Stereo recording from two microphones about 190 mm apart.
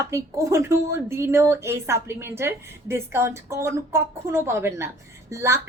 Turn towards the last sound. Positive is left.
turn(degrees=-15)  # may be behind; listen again after turning